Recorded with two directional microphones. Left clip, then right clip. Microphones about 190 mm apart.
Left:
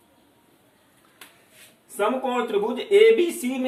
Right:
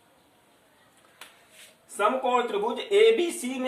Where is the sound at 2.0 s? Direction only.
15° right (ahead or behind).